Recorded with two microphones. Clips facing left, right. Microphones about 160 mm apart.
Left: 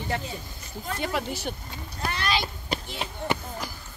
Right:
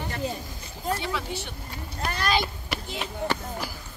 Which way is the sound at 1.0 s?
45° left (ahead or behind).